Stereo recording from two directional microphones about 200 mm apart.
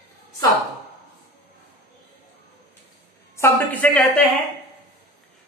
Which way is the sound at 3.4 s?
10° left (ahead or behind).